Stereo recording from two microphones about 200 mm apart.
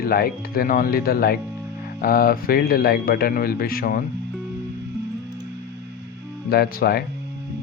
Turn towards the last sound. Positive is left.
turn(degrees=50)  # may be behind; listen again after turning